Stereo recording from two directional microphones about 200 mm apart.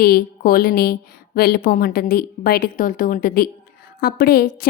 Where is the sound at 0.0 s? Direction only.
50° left (ahead or behind).